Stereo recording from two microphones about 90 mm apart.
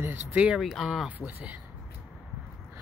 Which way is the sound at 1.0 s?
15° right (ahead or behind).